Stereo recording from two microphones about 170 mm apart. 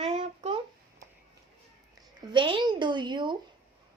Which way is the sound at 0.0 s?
40° right (ahead or behind).